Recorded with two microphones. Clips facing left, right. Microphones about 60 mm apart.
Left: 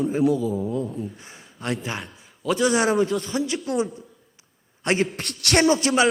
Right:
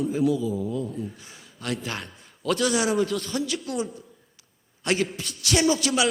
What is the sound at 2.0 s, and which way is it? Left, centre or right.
Speech, centre.